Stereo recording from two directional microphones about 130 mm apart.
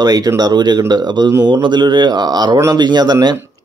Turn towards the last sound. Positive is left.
turn(degrees=-30)  # may be behind; listen again after turning